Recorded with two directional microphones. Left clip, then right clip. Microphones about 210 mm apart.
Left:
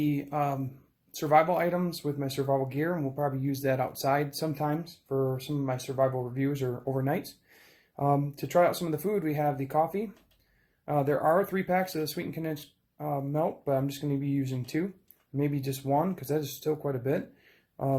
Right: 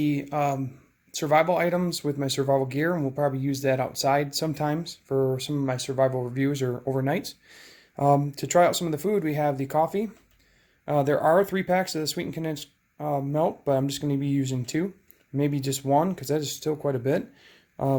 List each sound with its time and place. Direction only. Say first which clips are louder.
0.0 s speech: right 4 dB; 30° right (ahead or behind)